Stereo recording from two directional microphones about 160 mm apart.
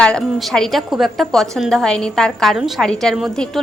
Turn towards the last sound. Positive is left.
turn(degrees=0)  # may be behind; listen again after turning